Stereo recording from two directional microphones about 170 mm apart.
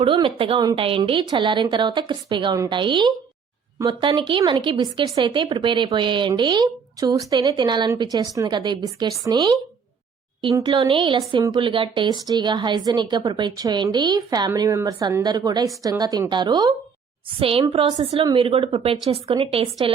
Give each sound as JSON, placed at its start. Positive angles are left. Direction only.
{"t": 0.0, "sound": "a woman's voice", "side_deg": -30}